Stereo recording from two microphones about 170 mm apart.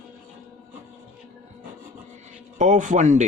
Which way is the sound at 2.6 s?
45° right (ahead or behind).